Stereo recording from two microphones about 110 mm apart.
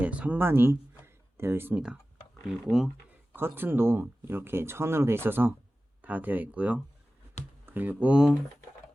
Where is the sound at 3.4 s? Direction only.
20° right (ahead or behind).